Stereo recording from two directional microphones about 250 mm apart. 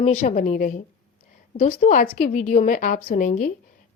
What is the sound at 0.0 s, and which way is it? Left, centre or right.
A woman's voice, left.